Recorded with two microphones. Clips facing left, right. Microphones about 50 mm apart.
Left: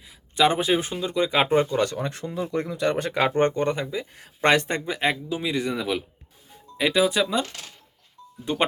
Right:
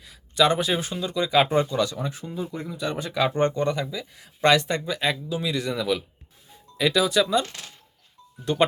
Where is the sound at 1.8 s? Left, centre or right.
Left.